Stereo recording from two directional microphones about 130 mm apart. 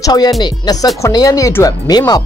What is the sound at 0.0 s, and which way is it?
Speech, 30° left (ahead or behind).